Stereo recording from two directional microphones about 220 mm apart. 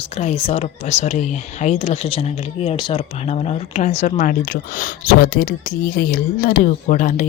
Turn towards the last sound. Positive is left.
turn(degrees=35)  # may be behind; listen again after turning